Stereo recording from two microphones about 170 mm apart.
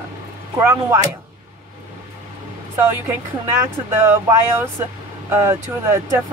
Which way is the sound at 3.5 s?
15° right (ahead or behind).